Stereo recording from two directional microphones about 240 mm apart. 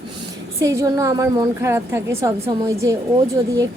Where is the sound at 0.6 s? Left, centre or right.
Centre.